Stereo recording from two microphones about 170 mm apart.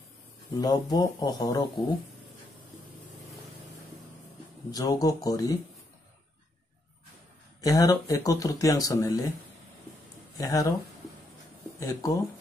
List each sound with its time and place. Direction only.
0.6 s speech: 25° left (ahead or behind)
4.6 s speech: 20° left (ahead or behind)
7.6 s speech: 20° left (ahead or behind)
10.3 s speech: 20° left (ahead or behind)
11.8 s speech: 20° left (ahead or behind)